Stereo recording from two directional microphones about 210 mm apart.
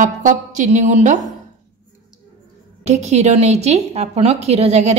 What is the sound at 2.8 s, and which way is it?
A woman's voice, 30° right (ahead or behind).